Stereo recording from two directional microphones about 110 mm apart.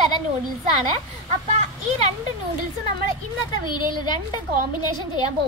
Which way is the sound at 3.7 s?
45° left (ahead or behind).